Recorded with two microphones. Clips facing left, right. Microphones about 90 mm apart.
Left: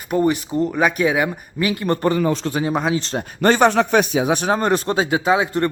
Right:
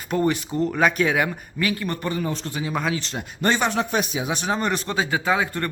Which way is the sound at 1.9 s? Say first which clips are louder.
Left 9 dB; 50° left (ahead or behind).